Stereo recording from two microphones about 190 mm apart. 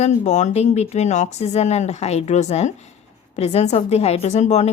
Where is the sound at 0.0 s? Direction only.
40° left (ahead or behind).